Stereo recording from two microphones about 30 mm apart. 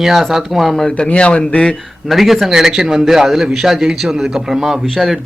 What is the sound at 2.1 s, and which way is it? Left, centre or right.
Speech, centre.